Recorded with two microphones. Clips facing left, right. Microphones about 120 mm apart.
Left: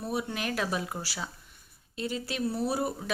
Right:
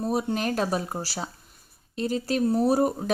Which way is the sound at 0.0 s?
40° right (ahead or behind).